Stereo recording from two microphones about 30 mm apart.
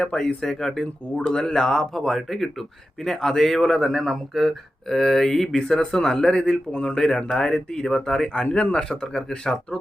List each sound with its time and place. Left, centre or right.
0.0 s speech: left
1.1 s speech: left
1.4 s speech: left
2.0 s speech: centre; by 6.9 s left
6.9 s speech: centre